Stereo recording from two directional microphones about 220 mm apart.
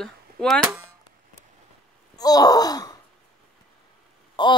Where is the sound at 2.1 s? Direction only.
15° left (ahead or behind).